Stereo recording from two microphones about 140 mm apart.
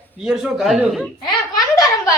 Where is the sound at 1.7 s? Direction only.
25° left (ahead or behind).